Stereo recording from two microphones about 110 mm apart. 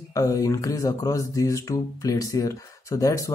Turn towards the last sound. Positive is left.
turn(degrees=30)  # may be behind; listen again after turning